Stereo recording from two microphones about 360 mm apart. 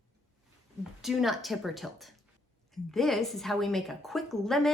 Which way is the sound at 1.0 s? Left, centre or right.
Centre.